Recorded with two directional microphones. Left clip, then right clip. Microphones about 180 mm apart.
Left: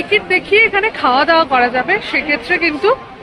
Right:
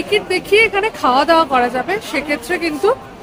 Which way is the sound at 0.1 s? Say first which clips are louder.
Left 2 dB; 15° right (ahead or behind).